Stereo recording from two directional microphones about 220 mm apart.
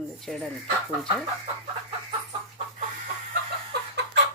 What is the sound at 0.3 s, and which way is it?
Speech, centre (ahead or behind).